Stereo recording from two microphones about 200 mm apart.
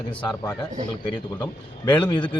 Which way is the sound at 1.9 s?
25° left (ahead or behind).